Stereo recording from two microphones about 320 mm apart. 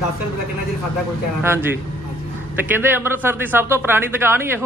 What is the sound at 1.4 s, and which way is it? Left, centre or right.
Speech, centre.